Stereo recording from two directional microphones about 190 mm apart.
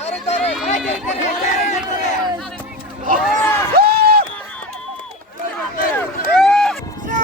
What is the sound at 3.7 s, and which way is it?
Run, 55° right (ahead or behind).